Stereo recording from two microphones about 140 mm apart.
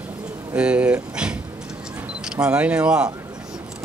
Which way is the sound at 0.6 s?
10° right (ahead or behind).